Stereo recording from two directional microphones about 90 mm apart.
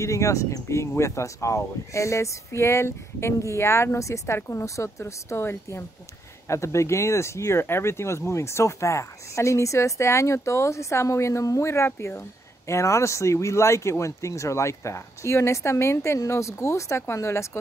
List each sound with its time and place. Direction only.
0.0 s speech: 35° left (ahead or behind)